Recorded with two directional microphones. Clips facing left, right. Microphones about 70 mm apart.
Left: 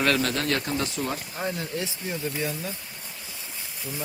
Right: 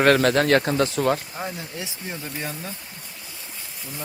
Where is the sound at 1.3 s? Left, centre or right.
Centre.